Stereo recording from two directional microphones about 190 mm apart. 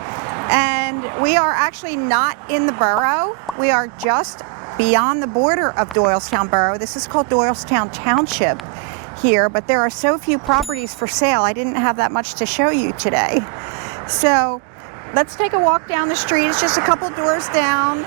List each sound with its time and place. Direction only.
0.1 s a woman's voice: 20° right (ahead or behind)